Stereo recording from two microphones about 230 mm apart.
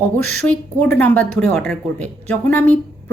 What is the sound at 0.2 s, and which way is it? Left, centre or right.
Speech, right.